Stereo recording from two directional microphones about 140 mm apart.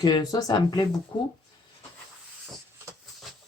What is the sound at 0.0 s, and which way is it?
Speech, 25° left (ahead or behind).